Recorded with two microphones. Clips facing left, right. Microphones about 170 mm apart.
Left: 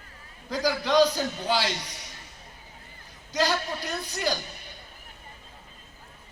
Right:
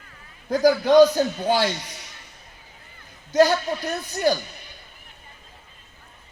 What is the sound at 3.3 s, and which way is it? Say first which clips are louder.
A man's voice: right 9 dB; 50° right (ahead or behind).